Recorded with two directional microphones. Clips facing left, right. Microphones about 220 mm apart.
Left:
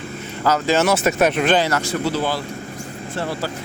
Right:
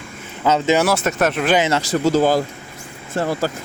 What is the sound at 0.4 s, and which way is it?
Speech, 25° right (ahead or behind).